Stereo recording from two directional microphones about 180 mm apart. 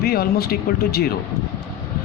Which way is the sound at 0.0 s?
60° left (ahead or behind).